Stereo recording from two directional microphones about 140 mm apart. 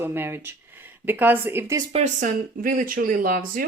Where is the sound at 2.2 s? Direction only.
75° right (ahead or behind).